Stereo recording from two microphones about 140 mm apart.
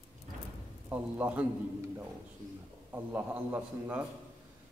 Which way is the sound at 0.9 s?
10° right (ahead or behind).